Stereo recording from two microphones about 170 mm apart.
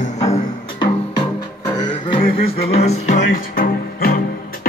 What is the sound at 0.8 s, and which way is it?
Music, 25° left (ahead or behind).